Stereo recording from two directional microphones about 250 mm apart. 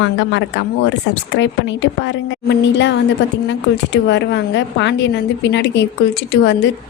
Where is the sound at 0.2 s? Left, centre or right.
Left.